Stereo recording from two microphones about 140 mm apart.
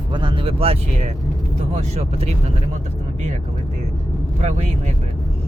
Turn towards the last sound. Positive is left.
turn(degrees=-55)  # may be behind; listen again after turning